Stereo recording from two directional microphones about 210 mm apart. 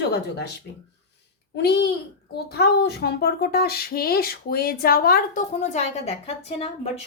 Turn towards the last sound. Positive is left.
turn(degrees=30)  # may be behind; listen again after turning